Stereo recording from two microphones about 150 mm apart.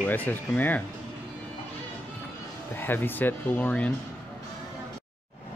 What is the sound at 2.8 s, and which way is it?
Speech, 15° left (ahead or behind).